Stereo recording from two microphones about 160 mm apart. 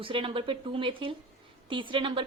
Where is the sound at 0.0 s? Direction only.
30° right (ahead or behind).